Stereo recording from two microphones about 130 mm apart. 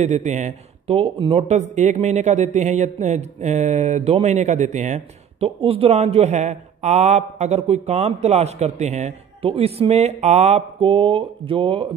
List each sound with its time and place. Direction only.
0.0 s a man's voice: 60° right (ahead or behind)
5.6 s a man's voice: 45° right (ahead or behind)